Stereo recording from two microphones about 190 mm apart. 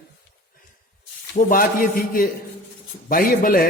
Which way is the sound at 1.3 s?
50° left (ahead or behind).